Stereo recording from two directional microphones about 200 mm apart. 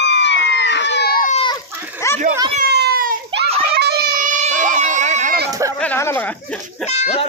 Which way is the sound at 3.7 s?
50° right (ahead or behind).